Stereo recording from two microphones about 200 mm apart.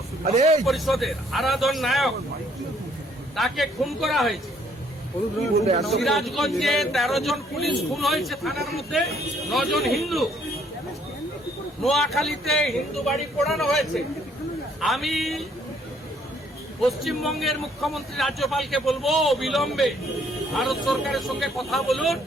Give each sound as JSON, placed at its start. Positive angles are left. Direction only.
{"t": 0.3, "sound": "a man's voice", "side_deg": -35}
{"t": 0.6, "sound": "speech", "side_deg": 0}
{"t": 3.3, "sound": "speech", "side_deg": 0}
{"t": 5.8, "sound": "speech", "side_deg": 0}
{"t": 11.8, "sound": "speech", "side_deg": 0}
{"t": 16.8, "sound": "speech", "side_deg": 0}